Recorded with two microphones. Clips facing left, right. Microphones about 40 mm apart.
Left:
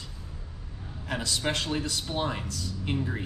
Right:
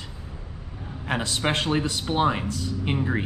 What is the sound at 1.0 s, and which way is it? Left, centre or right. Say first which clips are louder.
Speech: right 4 dB; right.